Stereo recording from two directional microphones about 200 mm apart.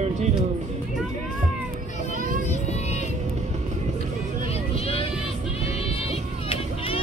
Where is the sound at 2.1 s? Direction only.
40° right (ahead or behind).